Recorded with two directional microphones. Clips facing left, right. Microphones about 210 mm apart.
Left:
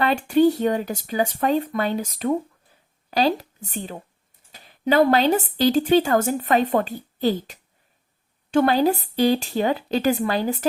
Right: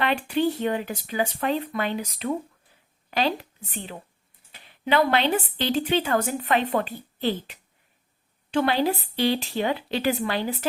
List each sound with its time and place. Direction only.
0.0 s a woman's voice: 40° left (ahead or behind)